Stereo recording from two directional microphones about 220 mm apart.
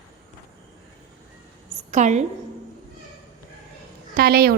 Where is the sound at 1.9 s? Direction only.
35° right (ahead or behind).